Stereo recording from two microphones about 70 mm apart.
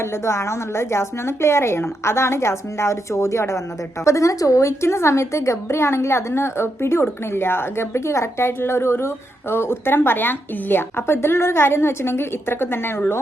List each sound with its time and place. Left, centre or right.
0.0 s a woman's voice: left